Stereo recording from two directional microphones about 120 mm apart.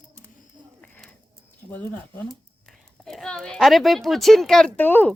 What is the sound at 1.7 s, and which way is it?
Speech, 15° left (ahead or behind).